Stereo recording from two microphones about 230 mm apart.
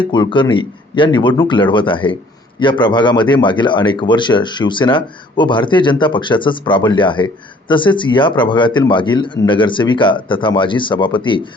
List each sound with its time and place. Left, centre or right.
0.0 s speech: left